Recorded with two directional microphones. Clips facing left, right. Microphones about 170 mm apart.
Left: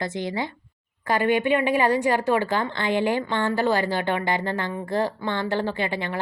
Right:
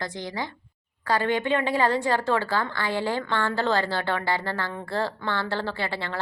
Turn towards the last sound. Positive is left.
turn(degrees=15)  # may be behind; listen again after turning